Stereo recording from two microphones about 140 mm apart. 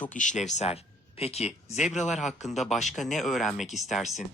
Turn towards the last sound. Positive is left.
turn(degrees=0)  # may be behind; listen again after turning